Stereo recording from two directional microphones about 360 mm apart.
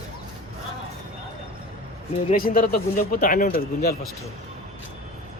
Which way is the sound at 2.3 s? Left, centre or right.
Left.